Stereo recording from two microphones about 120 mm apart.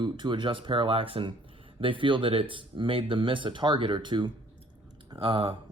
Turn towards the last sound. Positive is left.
turn(degrees=-50)  # may be behind; listen again after turning